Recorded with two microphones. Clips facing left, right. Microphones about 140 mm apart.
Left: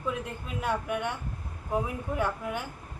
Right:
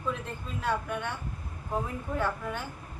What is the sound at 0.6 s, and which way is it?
A woman's voice, 15° left (ahead or behind).